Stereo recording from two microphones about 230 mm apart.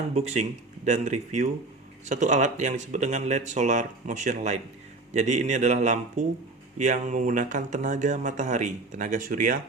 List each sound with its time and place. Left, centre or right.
0.1 s speech: right